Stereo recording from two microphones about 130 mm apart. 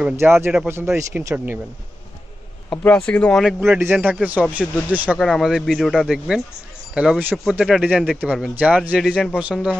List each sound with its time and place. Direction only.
0.2 s a man's voice: 20° right (ahead or behind)
2.7 s speech: 10° left (ahead or behind)
3.6 s a man's voice: 15° right (ahead or behind)
5.2 s a man's voice: centre (ahead or behind)